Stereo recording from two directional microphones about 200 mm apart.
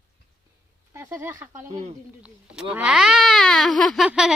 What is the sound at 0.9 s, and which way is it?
Speech, 10° right (ahead or behind).